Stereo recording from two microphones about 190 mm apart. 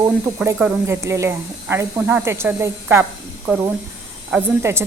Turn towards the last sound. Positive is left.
turn(degrees=-15)  # may be behind; listen again after turning